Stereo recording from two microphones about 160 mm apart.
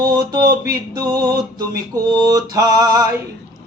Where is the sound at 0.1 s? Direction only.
20° right (ahead or behind).